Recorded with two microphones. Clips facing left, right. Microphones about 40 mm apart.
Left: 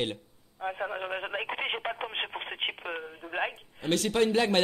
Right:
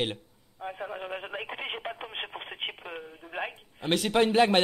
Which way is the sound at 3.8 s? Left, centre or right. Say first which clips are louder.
Right 1 dB; right.